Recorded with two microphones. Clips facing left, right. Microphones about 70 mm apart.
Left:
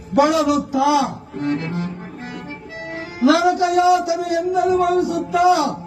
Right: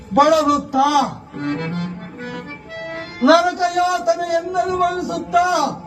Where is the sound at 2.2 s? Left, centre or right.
Right.